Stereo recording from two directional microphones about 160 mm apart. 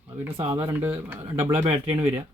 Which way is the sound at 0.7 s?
15° right (ahead or behind).